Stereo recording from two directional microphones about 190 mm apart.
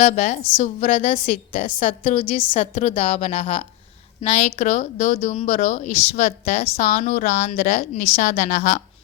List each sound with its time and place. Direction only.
0.0 s a woman's voice: 40° left (ahead or behind)